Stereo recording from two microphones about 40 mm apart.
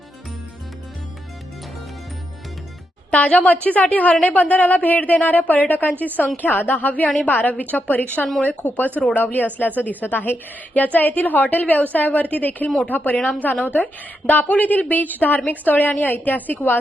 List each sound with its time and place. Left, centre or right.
3.1 s a woman's voice: left